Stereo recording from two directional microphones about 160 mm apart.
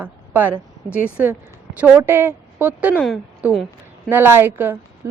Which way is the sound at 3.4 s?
10° right (ahead or behind).